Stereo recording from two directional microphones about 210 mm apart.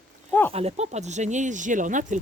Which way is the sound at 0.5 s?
30° right (ahead or behind).